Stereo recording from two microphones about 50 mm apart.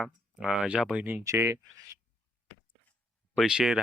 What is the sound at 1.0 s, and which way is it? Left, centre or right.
Speech, right.